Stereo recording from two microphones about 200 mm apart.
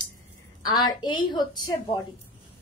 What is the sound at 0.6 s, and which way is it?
A woman's voice, 20° left (ahead or behind).